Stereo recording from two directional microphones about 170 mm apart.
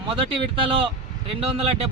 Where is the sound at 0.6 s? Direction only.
30° right (ahead or behind).